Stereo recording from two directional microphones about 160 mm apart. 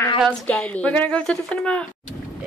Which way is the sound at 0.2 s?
5° left (ahead or behind).